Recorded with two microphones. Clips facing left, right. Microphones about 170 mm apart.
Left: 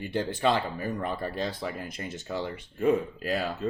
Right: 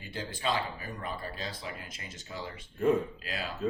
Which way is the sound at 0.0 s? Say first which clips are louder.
Left 9 dB; 65° left (ahead or behind).